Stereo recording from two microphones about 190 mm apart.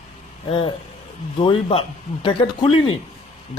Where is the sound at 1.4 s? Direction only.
30° left (ahead or behind).